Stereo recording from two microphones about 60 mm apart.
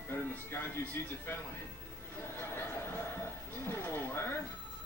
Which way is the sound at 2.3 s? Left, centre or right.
Left.